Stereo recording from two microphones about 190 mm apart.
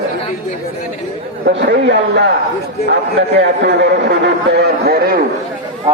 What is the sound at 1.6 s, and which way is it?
Speech, 65° right (ahead or behind).